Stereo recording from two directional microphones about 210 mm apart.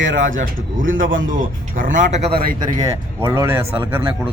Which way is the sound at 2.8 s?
15° right (ahead or behind).